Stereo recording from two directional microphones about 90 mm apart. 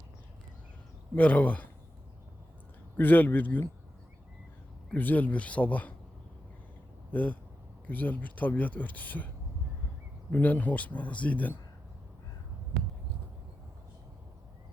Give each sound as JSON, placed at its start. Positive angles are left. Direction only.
{"t": 1.1, "sound": "speech", "side_deg": 15}
{"t": 3.0, "sound": "speech", "side_deg": 20}
{"t": 4.9, "sound": "speech", "side_deg": 20}
{"t": 7.1, "sound": "speech", "side_deg": 15}
{"t": 10.3, "sound": "speech", "side_deg": 15}